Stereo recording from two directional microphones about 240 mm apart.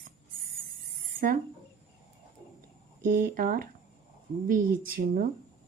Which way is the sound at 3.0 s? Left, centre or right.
Right.